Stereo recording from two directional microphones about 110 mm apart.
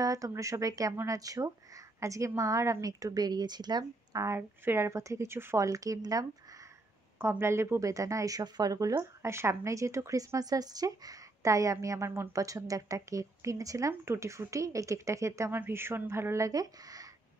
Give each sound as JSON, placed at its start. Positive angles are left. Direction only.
{"t": 0.0, "sound": "a woman's voice", "side_deg": -30}